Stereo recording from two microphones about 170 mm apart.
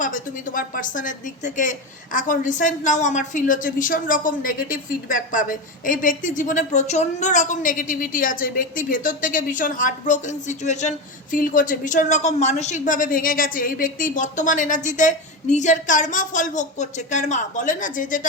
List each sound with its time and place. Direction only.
0.0 s a woman's voice: 50° left (ahead or behind)